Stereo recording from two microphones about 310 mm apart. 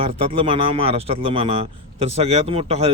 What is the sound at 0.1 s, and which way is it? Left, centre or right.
Speech, centre.